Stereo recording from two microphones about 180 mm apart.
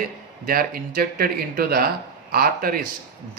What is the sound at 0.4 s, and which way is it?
A man's voice, 55° right (ahead or behind).